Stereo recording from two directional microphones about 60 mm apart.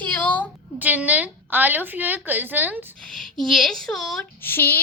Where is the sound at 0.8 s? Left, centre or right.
Right.